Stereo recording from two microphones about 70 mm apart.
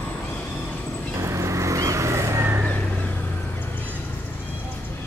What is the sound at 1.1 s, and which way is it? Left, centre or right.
Vehicle, right.